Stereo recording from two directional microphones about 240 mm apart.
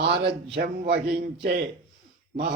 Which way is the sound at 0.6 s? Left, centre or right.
Right.